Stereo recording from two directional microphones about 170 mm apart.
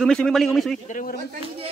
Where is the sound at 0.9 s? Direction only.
55° left (ahead or behind).